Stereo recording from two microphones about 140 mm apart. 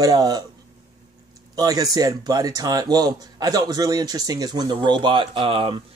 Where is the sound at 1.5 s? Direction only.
25° right (ahead or behind).